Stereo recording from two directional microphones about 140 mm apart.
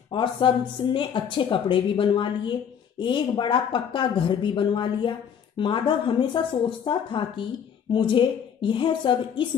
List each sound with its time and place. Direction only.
0.1 s speech: 35° left (ahead or behind)